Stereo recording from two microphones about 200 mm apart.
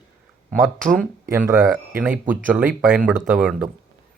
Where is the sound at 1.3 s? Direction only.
10° right (ahead or behind).